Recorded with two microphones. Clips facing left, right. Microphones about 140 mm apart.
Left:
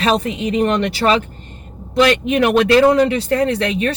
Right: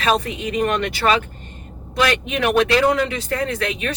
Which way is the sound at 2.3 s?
35° left (ahead or behind).